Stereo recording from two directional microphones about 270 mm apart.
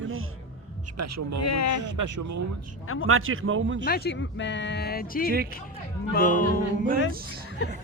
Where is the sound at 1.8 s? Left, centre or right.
Right.